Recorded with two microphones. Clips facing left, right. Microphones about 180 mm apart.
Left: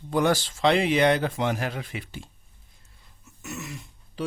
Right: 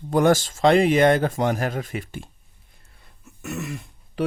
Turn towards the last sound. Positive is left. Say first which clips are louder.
# right 7 dB
turn(degrees=-60)  # may be behind; listen again after turning